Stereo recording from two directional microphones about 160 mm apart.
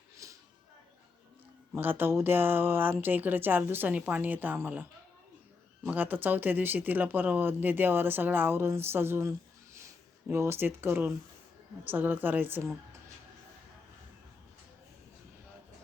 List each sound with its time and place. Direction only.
0.2 s music: 20° right (ahead or behind)
1.7 s speech: 10° right (ahead or behind)